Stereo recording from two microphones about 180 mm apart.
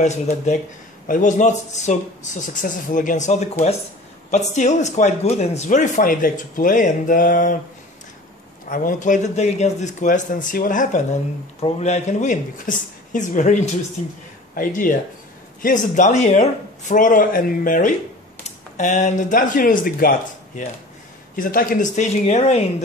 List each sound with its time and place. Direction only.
0.0 s speech: 40° left (ahead or behind)
8.6 s speech: 45° left (ahead or behind)